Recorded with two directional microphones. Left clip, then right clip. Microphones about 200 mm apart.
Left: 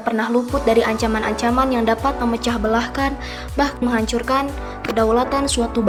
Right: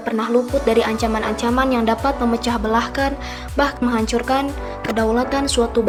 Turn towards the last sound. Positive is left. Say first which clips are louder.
# right 2 dB
turn(degrees=0)  # may be behind; listen again after turning